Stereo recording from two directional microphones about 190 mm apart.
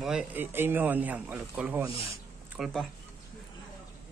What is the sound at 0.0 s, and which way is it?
A man's voice, 5° right (ahead or behind).